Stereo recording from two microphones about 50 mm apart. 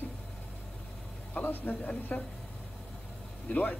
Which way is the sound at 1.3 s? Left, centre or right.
Left.